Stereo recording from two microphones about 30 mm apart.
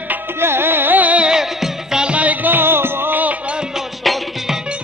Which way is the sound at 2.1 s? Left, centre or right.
Right.